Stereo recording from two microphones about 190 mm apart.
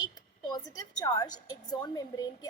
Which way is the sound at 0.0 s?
20° left (ahead or behind).